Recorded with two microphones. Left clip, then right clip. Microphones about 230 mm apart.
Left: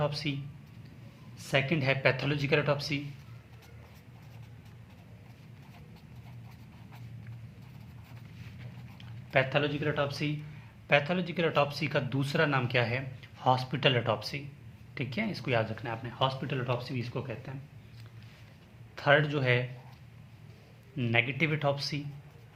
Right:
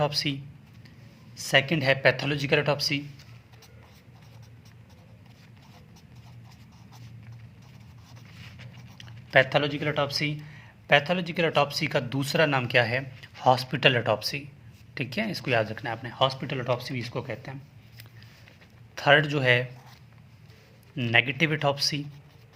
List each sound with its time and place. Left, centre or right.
0.0 s speech: right
1.4 s speech: right
9.0 s speech: right
18.9 s speech: right
20.9 s speech: right